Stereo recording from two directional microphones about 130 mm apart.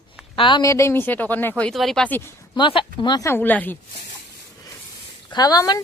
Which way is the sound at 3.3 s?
15° left (ahead or behind).